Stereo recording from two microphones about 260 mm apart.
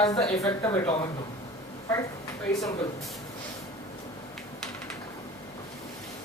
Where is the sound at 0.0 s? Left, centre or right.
Centre.